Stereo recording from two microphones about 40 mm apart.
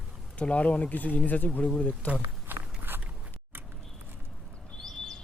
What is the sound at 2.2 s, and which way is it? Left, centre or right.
Walk, right.